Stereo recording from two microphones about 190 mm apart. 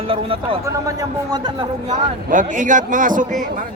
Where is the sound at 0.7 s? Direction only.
15° right (ahead or behind).